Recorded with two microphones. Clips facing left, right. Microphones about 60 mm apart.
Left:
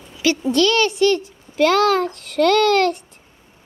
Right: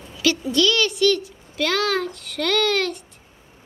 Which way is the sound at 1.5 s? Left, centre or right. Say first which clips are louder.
Left 7 dB; left.